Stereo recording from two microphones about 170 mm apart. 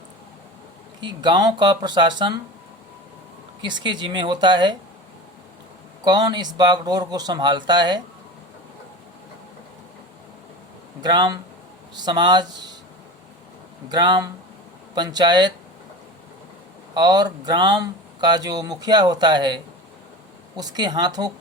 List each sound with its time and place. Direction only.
1.0 s speech: 25° right (ahead or behind)
3.6 s speech: 25° right (ahead or behind)
6.1 s speech: 25° right (ahead or behind)
11.0 s speech: 25° right (ahead or behind)
13.9 s speech: 25° right (ahead or behind)
16.9 s speech: 25° right (ahead or behind)